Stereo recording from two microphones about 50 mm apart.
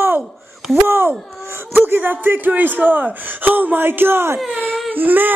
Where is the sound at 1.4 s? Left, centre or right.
Right.